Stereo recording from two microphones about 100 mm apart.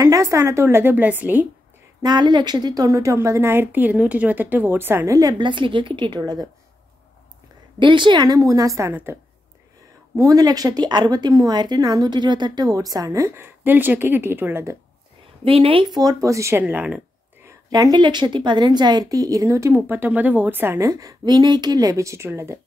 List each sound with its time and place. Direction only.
0.0 s a woman's voice: 30° right (ahead or behind); by 1.5 s 15° right (ahead or behind)
2.0 s a woman's voice: 45° right (ahead or behind)
5.4 s speech: 55° right (ahead or behind)
7.8 s speech: 50° right (ahead or behind)
8.4 s a woman's voice: 35° right (ahead or behind)
10.1 s speech: 35° right (ahead or behind)
15.4 s a woman's voice: 65° right (ahead or behind)
15.9 s speech: 40° right (ahead or behind)
16.6 s speech: 10° right (ahead or behind)
17.9 s speech: 50° right (ahead or behind); by 19.8 s 30° right (ahead or behind)
19.9 s a woman's voice: 20° right (ahead or behind)
20.9 s speech: 35° right (ahead or behind)